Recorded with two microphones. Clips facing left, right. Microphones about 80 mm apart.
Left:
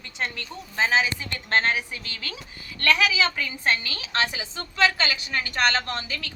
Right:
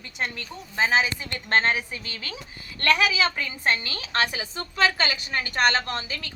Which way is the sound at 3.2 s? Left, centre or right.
Right.